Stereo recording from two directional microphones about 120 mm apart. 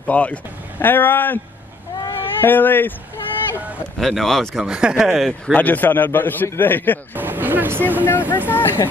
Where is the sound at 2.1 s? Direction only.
15° left (ahead or behind).